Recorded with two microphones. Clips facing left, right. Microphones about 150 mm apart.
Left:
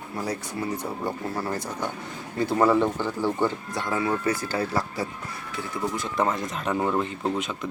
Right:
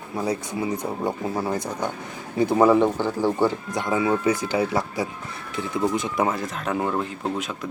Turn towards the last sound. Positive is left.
turn(degrees=0)  # may be behind; listen again after turning